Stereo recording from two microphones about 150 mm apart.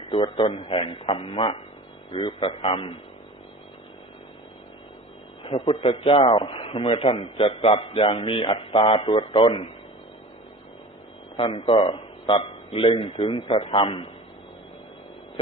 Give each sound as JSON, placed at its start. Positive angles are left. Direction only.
{"t": 0.1, "sound": "a man's voice", "side_deg": 35}
{"t": 5.4, "sound": "a man's voice", "side_deg": 35}
{"t": 11.3, "sound": "a man's voice", "side_deg": 35}